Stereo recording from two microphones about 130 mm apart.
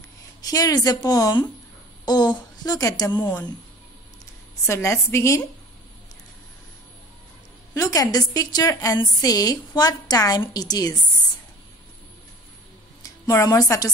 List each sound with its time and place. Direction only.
0.4 s a woman's voice: 30° left (ahead or behind)
4.6 s a woman's voice: 20° left (ahead or behind)
7.7 s a woman's voice: 25° left (ahead or behind)
13.0 s a woman's voice: 25° left (ahead or behind)